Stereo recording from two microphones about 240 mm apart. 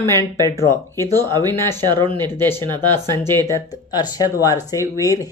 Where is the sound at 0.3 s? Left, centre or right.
Centre.